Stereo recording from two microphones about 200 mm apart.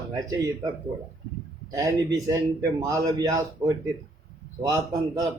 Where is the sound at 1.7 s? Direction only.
15° right (ahead or behind).